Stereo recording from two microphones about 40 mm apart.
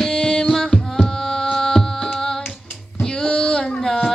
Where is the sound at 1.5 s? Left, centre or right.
Centre.